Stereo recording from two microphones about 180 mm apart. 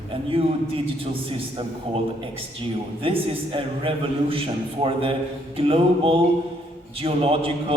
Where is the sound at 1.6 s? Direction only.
30° right (ahead or behind).